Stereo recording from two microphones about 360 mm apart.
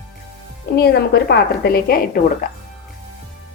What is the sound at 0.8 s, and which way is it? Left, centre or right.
A woman's voice, left.